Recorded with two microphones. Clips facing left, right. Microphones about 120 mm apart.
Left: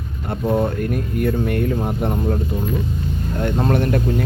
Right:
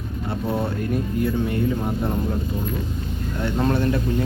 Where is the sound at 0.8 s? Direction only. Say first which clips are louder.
Left 2 dB; 60° left (ahead or behind).